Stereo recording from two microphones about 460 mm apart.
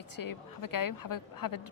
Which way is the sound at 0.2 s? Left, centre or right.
Left.